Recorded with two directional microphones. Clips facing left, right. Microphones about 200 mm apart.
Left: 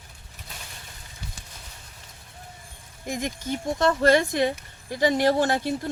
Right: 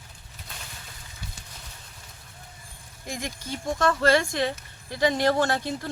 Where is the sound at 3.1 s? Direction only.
15° left (ahead or behind).